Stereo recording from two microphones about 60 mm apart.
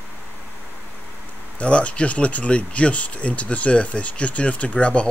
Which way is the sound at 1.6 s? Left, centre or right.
Left.